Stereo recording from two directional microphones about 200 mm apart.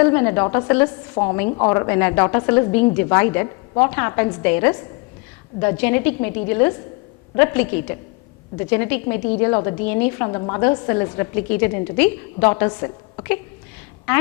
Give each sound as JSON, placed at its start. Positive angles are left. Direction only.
{"t": 0.0, "sound": "a woman's voice", "side_deg": 15}
{"t": 1.1, "sound": "a woman's voice", "side_deg": 25}
{"t": 1.7, "sound": "a woman's voice", "side_deg": 15}
{"t": 8.7, "sound": "a woman's voice", "side_deg": 10}
{"t": 9.1, "sound": "a woman's voice", "side_deg": 35}
{"t": 9.4, "sound": "a woman's voice", "side_deg": 20}
{"t": 10.2, "sound": "a woman's voice", "side_deg": 20}